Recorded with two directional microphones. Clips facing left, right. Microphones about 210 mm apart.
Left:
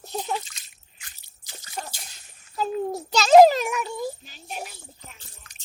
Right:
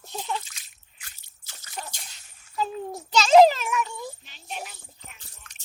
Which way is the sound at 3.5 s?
40° left (ahead or behind).